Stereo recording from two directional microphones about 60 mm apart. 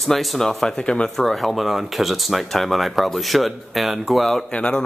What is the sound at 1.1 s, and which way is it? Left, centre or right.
Speech, centre.